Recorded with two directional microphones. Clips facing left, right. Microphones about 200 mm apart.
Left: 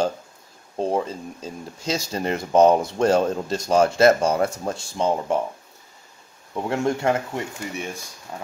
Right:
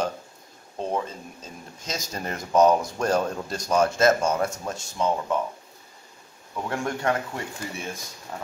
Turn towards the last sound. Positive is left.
turn(degrees=25)  # may be behind; listen again after turning